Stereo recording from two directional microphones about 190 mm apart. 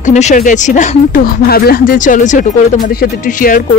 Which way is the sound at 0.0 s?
40° left (ahead or behind).